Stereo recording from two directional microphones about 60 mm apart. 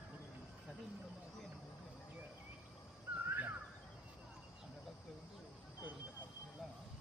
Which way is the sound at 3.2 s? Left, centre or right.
Right.